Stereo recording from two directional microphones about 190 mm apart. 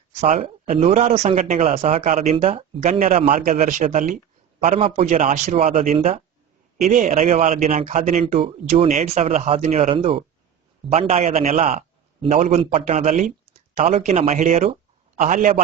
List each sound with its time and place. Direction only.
0.2 s speech: 35° right (ahead or behind)
6.0 s speech: 35° right (ahead or behind)